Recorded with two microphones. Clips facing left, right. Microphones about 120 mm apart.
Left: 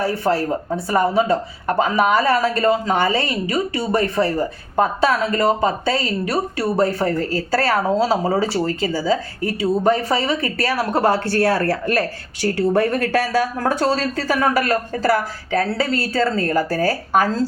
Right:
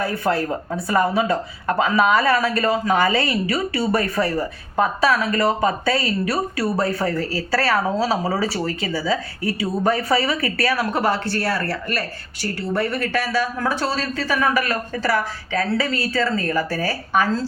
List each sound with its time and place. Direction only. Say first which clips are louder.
0.0 s a woman's voice: left 2 dB; 30° left (ahead or behind)
9.6 s a woman's voice: left 4 dB; 25° left (ahead or behind)